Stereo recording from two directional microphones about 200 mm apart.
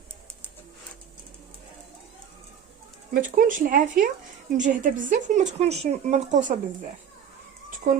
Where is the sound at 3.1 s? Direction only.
45° right (ahead or behind).